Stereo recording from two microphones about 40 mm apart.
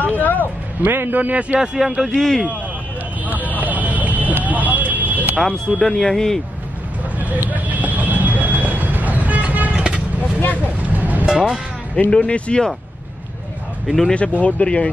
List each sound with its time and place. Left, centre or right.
0.0 s vehicle: left
0.8 s a man's voice: right
1.8 s speech: centre
2.1 s speech: centre
3.3 s vehicle: right
5.8 s speech: centre
7.2 s vehicle: right
10.9 s music: right
11.2 s speech: centre
12.1 s speech: left
14.0 s speech: left